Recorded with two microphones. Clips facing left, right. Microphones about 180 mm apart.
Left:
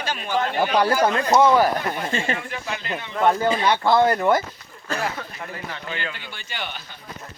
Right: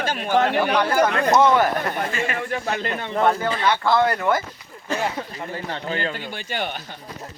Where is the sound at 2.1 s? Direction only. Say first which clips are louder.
Left 1 dB; 30° left (ahead or behind).